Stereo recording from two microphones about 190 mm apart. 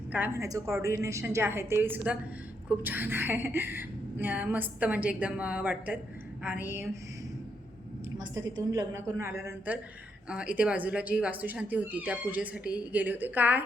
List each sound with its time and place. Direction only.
0.1 s a woman's voice: 10° right (ahead or behind)
8.2 s a woman's voice: 20° right (ahead or behind)